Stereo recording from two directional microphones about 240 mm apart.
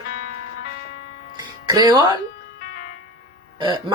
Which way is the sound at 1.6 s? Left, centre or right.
Centre.